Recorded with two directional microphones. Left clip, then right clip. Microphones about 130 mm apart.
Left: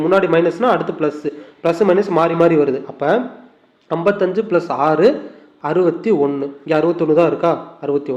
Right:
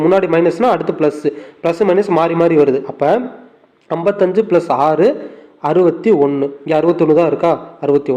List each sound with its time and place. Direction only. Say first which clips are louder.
0.0 s a man's voice: right 2 dB; 25° right (ahead or behind)
5.2 s a sound: right 5 dB; 25° right (ahead or behind)
6.0 s a man's voice: right 4 dB; 25° right (ahead or behind)